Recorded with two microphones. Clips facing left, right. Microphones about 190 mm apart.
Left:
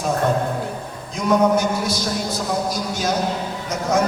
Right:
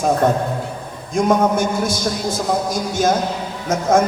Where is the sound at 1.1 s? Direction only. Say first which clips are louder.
Right 1 dB; 50° right (ahead or behind).